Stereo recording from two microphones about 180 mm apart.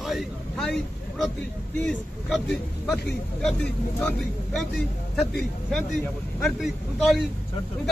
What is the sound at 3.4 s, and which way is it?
Speech, 5° left (ahead or behind).